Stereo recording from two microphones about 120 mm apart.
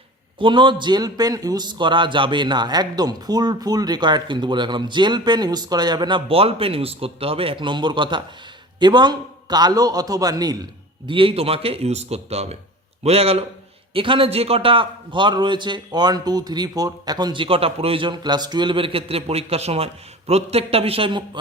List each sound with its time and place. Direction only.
0.3 s a man's voice: 40° right (ahead or behind)
11.0 s a man's voice: 45° right (ahead or behind)